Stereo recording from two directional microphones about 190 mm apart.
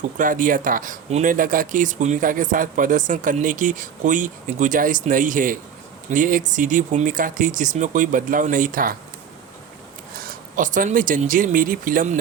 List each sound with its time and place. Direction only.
0.2 s speech: 45° right (ahead or behind)
10.2 s speech: 45° right (ahead or behind)